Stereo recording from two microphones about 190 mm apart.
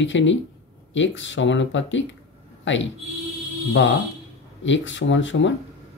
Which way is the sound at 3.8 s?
80° left.